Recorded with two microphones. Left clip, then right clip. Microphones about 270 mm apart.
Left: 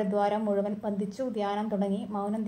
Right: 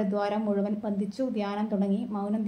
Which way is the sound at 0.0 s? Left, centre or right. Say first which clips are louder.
Left 1 dB; left.